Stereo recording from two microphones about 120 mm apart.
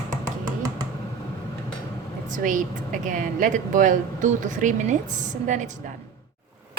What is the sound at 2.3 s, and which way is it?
A woman's voice, 90° right.